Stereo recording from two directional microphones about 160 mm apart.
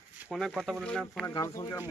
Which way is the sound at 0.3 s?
Centre (ahead or behind).